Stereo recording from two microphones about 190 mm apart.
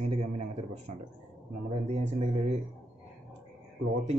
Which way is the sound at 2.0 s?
40° right (ahead or behind).